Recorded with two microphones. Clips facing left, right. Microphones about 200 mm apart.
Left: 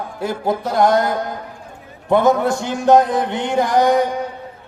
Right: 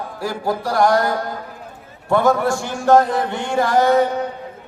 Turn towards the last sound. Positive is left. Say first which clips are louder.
# even
turn(degrees=15)  # may be behind; listen again after turning